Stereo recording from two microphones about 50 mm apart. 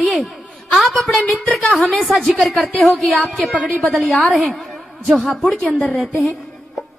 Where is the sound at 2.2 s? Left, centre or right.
Centre.